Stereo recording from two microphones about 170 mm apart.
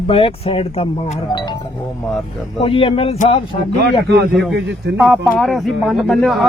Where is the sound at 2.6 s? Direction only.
35° left (ahead or behind).